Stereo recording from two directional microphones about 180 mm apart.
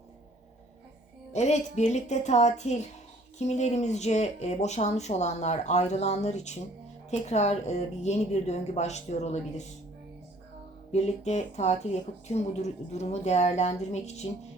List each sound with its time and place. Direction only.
1.3 s speech: 40° left (ahead or behind)
10.9 s speech: 40° left (ahead or behind)